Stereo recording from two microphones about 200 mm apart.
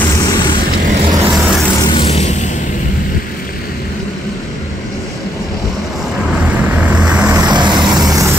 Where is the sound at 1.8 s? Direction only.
25° left (ahead or behind).